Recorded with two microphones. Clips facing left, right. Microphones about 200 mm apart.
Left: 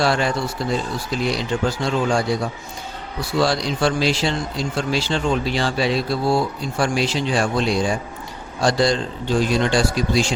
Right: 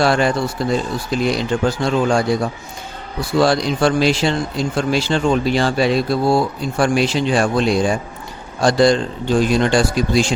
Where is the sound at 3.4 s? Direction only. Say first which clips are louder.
Right 4 dB; 55° right (ahead or behind).